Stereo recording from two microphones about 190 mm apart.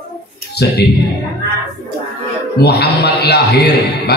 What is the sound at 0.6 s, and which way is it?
Speech, 60° left (ahead or behind).